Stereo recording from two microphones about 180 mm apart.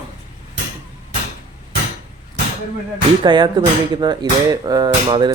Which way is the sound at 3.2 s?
25° right (ahead or behind).